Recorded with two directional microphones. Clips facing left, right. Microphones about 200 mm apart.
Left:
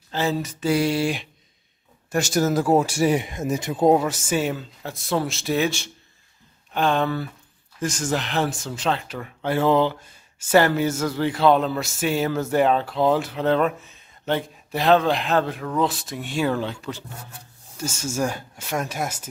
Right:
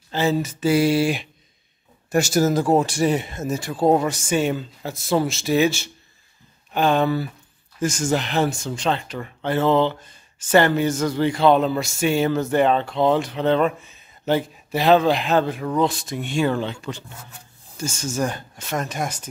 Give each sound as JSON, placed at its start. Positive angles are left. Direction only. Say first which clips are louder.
{"t": 0.1, "sound": "speech", "louder": "right 3 dB", "side_deg": 0}
{"t": 3.9, "sound": "speech", "louder": "right 1 dB", "side_deg": 5}